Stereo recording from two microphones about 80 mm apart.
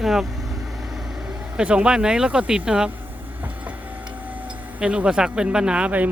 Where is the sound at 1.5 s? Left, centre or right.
Centre.